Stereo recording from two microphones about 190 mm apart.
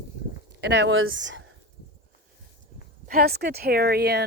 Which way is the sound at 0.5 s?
65° right (ahead or behind).